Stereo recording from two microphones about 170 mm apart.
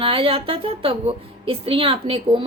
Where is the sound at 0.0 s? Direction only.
30° right (ahead or behind).